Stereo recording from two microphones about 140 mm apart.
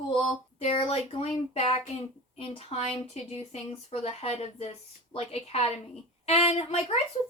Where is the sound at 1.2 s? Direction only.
45° left (ahead or behind).